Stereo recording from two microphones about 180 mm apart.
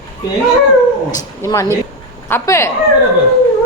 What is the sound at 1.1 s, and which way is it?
Speech, 20° left (ahead or behind).